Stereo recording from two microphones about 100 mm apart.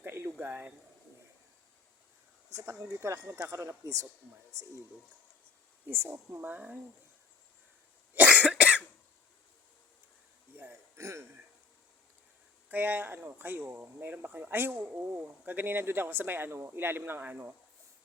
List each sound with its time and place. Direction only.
0.0 s a sound: 20° right (ahead or behind)
2.6 s speech: 30° right (ahead or behind)
5.9 s speech: 20° right (ahead or behind)
8.1 s cough: 15° right (ahead or behind)
10.5 s a sound: 20° right (ahead or behind)
12.6 s speech: 15° right (ahead or behind)